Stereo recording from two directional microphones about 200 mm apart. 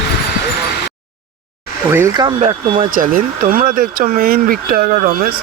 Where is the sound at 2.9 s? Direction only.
40° right (ahead or behind).